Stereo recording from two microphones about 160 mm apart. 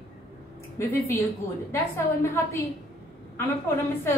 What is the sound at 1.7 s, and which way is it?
Speech, 15° left (ahead or behind).